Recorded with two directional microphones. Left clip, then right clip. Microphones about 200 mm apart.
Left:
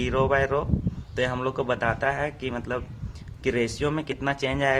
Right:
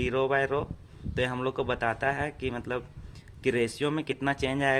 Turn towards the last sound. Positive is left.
turn(degrees=-20)  # may be behind; listen again after turning